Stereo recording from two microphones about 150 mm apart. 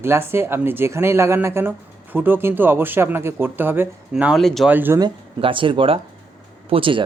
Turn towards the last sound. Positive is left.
turn(degrees=-35)  # may be behind; listen again after turning